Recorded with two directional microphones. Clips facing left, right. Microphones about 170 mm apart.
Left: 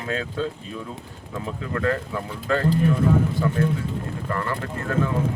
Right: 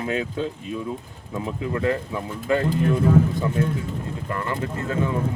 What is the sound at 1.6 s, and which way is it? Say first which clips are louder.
Speech: right 1 dB; 20° right (ahead or behind).